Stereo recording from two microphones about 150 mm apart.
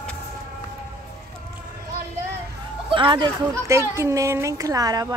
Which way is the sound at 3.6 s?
20° right (ahead or behind).